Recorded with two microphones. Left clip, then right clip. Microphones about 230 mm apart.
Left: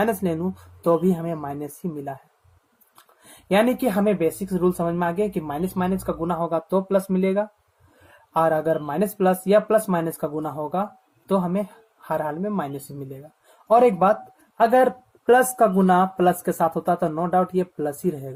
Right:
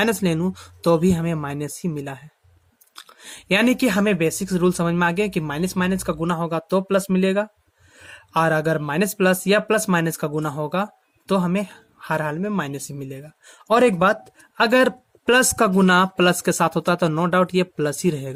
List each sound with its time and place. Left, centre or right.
0.0 s speech: right
3.5 s speech: right
12.0 s speech: right
13.7 s speech: right
17.6 s speech: right